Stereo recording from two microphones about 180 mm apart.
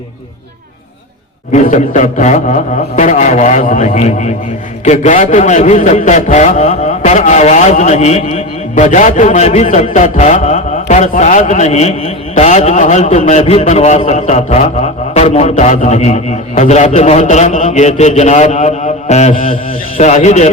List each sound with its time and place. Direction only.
1.5 s a man's voice: 40° left (ahead or behind)